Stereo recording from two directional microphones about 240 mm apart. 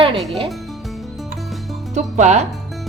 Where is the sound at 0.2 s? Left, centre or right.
Centre.